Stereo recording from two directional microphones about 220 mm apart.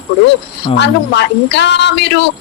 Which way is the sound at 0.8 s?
50° left (ahead or behind).